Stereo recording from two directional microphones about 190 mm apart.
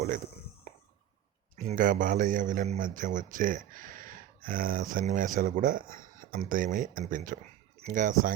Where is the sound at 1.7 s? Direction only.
45° right (ahead or behind).